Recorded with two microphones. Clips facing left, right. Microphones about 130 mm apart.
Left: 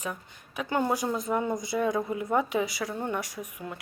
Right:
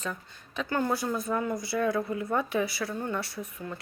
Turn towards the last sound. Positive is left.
turn(degrees=15)  # may be behind; listen again after turning